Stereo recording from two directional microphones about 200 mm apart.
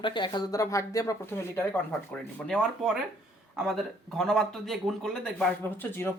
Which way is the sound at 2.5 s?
Centre (ahead or behind).